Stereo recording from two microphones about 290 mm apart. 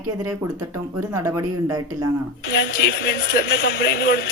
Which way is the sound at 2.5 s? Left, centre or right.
Left.